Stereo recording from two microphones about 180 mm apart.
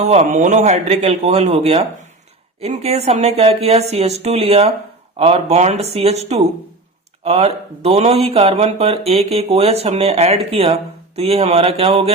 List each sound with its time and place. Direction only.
0.0 s speech: 40° right (ahead or behind)